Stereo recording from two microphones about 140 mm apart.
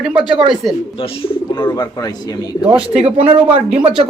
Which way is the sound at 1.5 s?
30° left (ahead or behind).